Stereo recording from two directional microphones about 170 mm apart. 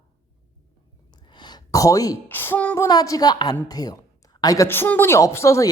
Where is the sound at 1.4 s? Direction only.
25° left (ahead or behind).